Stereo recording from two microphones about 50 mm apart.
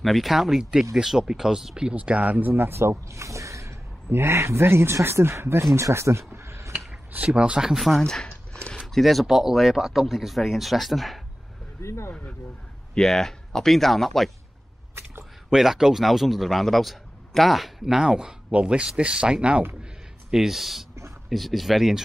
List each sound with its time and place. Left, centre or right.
0.0 s speech: centre
2.0 s speech: right
2.5 s speech: right
4.1 s speech: right
7.2 s speech: centre
7.6 s a man's voice: centre
8.0 s a sound: centre
8.7 s a man's voice: centre
11.8 s speech: left
12.9 s a man's voice: centre
15.5 s a man's voice: centre
20.2 s a man's voice: centre